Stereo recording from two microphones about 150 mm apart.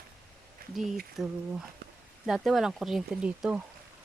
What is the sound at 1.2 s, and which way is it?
A woman's voice, centre (ahead or behind).